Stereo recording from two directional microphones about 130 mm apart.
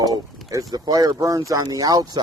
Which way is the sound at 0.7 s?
30° right (ahead or behind).